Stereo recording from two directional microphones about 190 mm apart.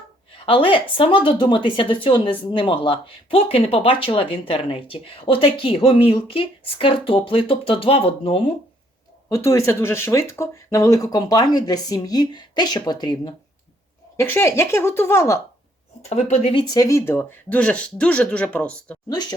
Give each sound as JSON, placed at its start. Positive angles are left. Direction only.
{"t": 0.3, "sound": "speech", "side_deg": 30}
{"t": 9.3, "sound": "speech", "side_deg": 15}
{"t": 16.0, "sound": "speech", "side_deg": 35}
{"t": 19.0, "sound": "speech", "side_deg": 20}